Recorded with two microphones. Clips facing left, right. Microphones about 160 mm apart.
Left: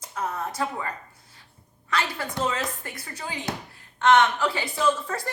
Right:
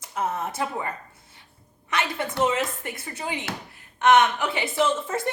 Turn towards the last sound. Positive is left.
turn(degrees=-25)  # may be behind; listen again after turning